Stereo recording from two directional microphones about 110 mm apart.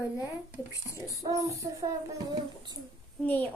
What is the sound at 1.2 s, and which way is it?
Child singing, 30° right (ahead or behind).